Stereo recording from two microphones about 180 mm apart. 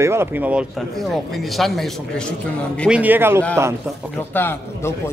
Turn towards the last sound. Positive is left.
turn(degrees=15)  # may be behind; listen again after turning